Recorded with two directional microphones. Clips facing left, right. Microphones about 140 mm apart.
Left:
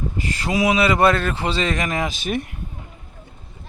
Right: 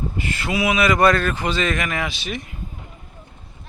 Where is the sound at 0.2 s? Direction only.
35° left (ahead or behind).